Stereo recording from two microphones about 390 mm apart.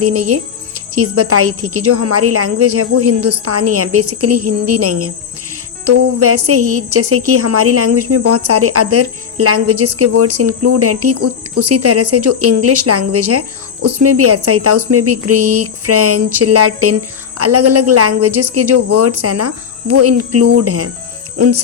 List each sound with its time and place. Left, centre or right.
0.0 s a woman's voice: right